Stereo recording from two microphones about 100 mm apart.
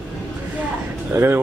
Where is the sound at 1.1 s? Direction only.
20° right (ahead or behind).